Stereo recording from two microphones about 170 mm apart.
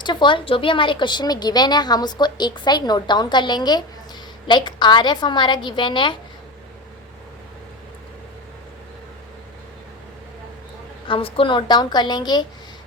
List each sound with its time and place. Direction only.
0.0 s a woman's voice: 25° left (ahead or behind)
11.1 s a woman's voice: 35° left (ahead or behind)